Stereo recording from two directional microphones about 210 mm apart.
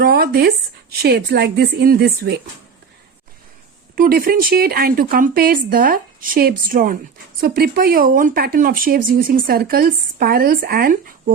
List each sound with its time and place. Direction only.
0.0 s speech: 50° right (ahead or behind)
3.9 s speech: 40° right (ahead or behind)